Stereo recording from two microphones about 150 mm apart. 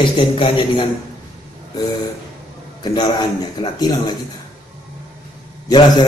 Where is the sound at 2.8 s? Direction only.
25° left (ahead or behind).